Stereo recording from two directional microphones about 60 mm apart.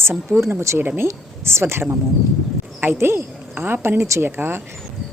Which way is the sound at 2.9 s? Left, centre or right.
Right.